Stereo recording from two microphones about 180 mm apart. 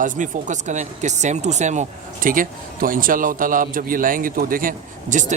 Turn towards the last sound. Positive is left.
turn(degrees=-45)  # may be behind; listen again after turning